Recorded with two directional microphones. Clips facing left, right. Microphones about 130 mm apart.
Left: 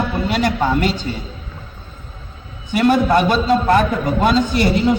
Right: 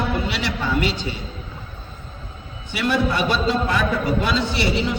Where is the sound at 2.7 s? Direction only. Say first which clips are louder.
Left 7 dB; 45° left (ahead or behind).